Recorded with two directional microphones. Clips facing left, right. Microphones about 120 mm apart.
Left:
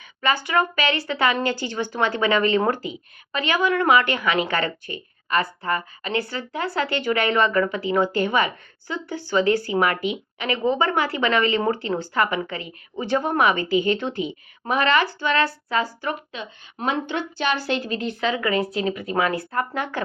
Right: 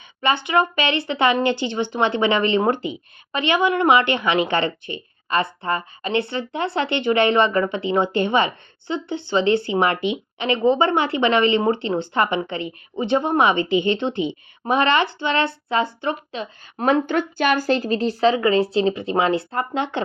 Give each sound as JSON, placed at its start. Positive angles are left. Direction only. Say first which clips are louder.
{"t": 0.2, "sound": "speech", "louder": "right 2 dB", "side_deg": -25}